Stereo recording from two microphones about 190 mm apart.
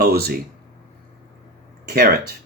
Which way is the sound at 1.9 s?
50° right (ahead or behind).